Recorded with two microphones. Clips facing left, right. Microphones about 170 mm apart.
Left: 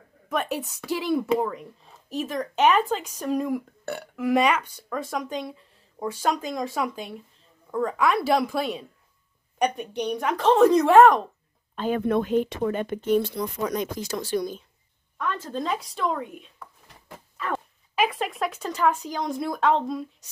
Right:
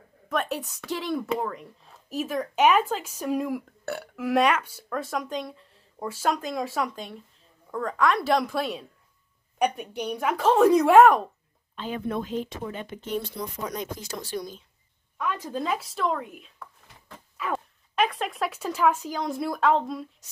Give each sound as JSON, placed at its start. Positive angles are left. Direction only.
{"t": 0.3, "sound": "speech", "side_deg": 0}
{"t": 11.7, "sound": "speech", "side_deg": 50}
{"t": 15.1, "sound": "speech", "side_deg": -10}